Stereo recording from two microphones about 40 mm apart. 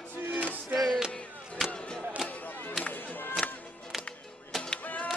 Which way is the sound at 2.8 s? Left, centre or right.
Left.